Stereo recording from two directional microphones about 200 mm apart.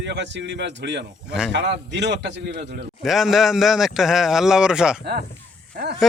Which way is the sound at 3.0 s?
Centre (ahead or behind).